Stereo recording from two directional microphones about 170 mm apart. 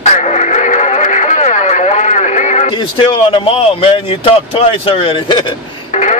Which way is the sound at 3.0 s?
30° left (ahead or behind).